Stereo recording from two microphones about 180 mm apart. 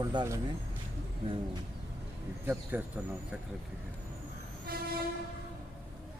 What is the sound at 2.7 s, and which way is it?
Speech, 10° right (ahead or behind).